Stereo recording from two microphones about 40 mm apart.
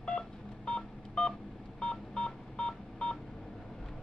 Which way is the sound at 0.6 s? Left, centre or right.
Left.